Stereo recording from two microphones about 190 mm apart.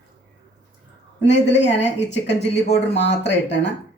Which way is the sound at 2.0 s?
70° left (ahead or behind).